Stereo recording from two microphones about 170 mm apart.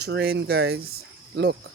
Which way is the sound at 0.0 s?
75° right (ahead or behind).